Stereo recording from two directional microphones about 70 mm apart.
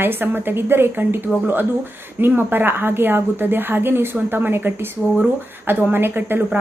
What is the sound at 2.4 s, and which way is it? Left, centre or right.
A woman's voice, right.